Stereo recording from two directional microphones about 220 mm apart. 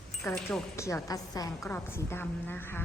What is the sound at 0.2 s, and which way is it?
A woman's voice, 15° left (ahead or behind).